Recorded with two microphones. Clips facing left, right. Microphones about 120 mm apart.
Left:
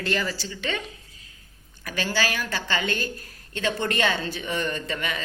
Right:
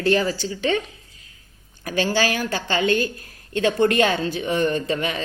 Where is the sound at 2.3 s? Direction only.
45° right (ahead or behind).